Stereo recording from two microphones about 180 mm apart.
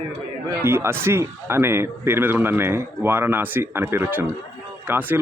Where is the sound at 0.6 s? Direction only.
15° right (ahead or behind).